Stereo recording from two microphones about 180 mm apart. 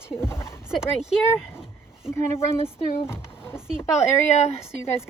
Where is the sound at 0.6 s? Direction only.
5° right (ahead or behind).